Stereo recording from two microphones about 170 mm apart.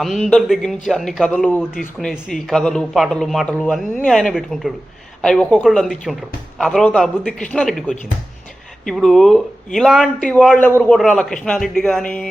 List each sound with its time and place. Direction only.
0.0 s a man's voice: centre (ahead or behind)